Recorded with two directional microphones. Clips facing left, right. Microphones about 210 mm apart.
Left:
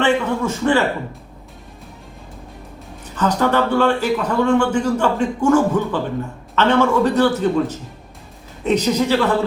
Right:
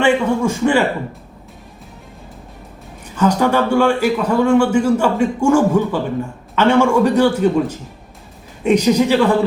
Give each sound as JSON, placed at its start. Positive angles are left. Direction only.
{"t": 0.0, "sound": "a man's voice", "side_deg": -10}
{"t": 3.2, "sound": "a man's voice", "side_deg": -10}